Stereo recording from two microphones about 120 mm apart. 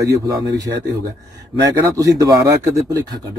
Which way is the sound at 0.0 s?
30° right (ahead or behind).